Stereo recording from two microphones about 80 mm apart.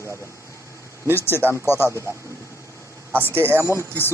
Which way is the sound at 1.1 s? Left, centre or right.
Left.